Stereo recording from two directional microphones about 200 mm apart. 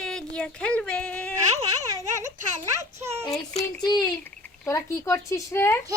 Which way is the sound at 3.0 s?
15° right (ahead or behind).